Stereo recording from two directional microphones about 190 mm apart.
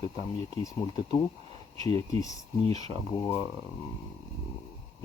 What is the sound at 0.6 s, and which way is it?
Speech, 20° left (ahead or behind).